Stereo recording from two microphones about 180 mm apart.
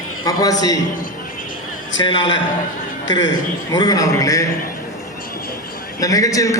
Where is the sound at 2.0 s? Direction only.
25° left (ahead or behind).